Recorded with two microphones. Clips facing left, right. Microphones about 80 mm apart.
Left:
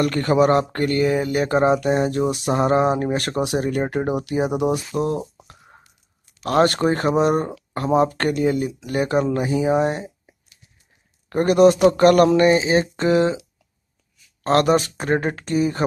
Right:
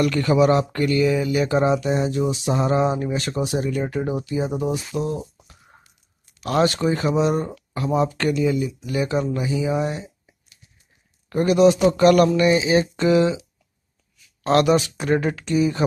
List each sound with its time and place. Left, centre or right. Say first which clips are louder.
0.0 s speech: even; left
6.4 s speech: left 2 dB; left
14.4 s speech: even; left